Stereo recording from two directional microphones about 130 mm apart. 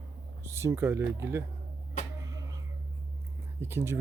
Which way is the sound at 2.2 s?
25° right (ahead or behind).